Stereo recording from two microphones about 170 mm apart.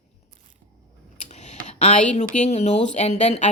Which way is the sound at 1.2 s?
40° left (ahead or behind).